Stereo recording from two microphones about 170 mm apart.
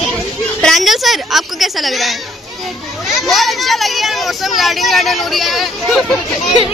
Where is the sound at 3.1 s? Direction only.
Centre (ahead or behind).